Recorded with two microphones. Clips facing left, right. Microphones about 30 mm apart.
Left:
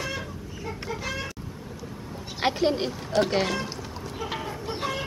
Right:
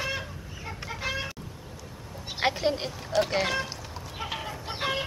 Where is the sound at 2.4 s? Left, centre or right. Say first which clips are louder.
Left 3 dB; centre.